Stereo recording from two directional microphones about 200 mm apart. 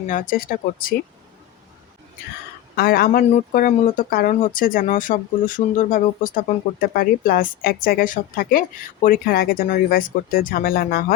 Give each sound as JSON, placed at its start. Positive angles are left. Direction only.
{"t": 0.1, "sound": "speech", "side_deg": 45}
{"t": 2.7, "sound": "speech", "side_deg": 50}